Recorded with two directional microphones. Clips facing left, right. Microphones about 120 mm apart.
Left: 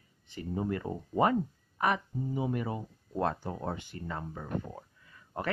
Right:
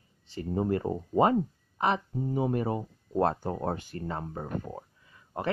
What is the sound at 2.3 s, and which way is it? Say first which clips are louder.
Speech: right 5 dB; 40° right (ahead or behind).